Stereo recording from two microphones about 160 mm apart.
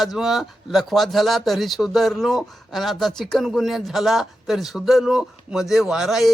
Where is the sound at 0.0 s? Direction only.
Centre (ahead or behind).